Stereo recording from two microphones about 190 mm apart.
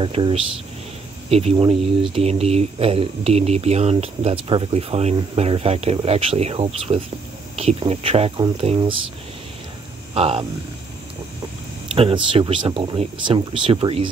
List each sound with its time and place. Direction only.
0.0 s speech: 30° right (ahead or behind)
10.1 s speech: 30° right (ahead or behind)
11.9 s speech: 30° right (ahead or behind)